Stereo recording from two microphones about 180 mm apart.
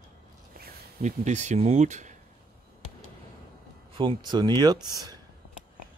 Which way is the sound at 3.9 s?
25° right (ahead or behind).